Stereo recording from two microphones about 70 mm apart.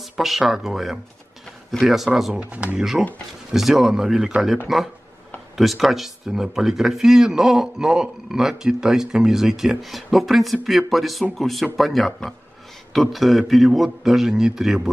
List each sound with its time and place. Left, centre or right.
0.0 s speech: centre
2.4 s speech: centre
2.8 s speech: centre
5.6 s speech: centre